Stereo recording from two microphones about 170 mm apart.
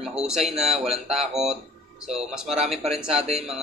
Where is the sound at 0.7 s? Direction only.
35° right (ahead or behind).